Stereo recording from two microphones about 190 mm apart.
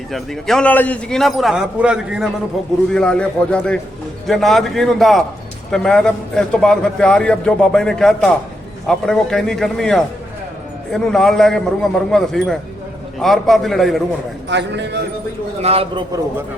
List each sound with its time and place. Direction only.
0.1 s a man's voice: centre (ahead or behind)
14.5 s a man's voice: 65° right (ahead or behind)
15.6 s a man's voice: 30° right (ahead or behind)